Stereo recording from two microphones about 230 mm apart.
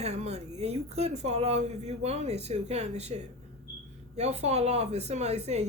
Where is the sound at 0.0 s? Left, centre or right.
Right.